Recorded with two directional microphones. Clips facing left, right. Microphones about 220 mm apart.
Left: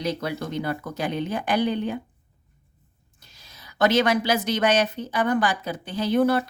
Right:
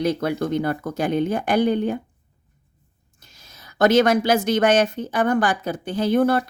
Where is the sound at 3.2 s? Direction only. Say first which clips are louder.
Right 2 dB; 45° right (ahead or behind).